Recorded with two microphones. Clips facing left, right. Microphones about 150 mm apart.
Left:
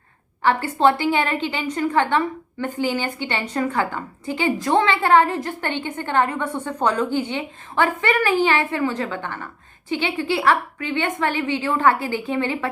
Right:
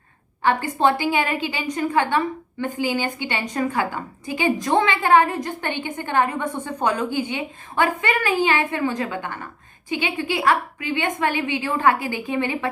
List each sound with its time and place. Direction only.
0.4 s a woman's voice: 15° right (ahead or behind)